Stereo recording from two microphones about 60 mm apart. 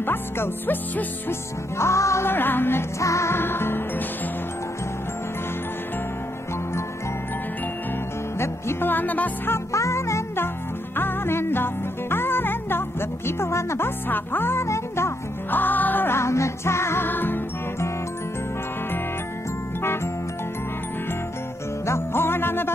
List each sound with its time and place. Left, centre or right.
0.0 s music: left
1.8 s music: left
2.2 s music: left
3.0 s music: left
3.3 s music: left
8.4 s music: left
8.9 s music: left
9.7 s music: left
11.0 s music: left
13.4 s music: left
15.5 s music: left
16.2 s music: left
17.1 s music: left
21.8 s music: left